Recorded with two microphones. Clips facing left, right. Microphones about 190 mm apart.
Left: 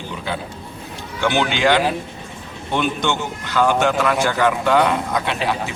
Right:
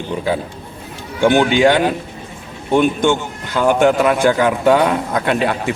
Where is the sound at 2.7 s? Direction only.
50° right (ahead or behind).